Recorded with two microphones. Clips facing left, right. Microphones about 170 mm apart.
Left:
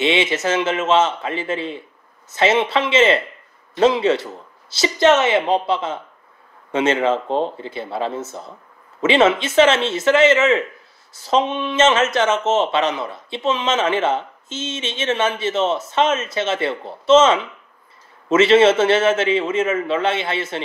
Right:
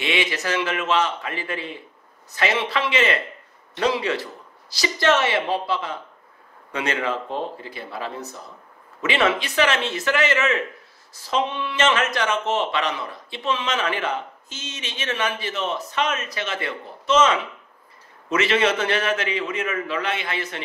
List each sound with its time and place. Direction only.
0.0 s speech: 25° left (ahead or behind)